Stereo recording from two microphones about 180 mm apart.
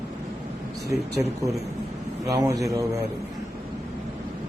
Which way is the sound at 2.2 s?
20° right (ahead or behind).